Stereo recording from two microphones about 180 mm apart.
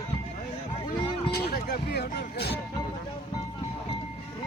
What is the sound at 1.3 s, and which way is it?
Speech, 60° left (ahead or behind).